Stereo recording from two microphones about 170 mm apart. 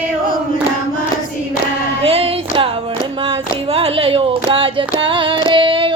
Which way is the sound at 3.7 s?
35° right (ahead or behind).